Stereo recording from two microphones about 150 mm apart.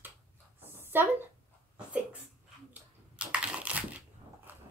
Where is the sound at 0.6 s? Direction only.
15° right (ahead or behind).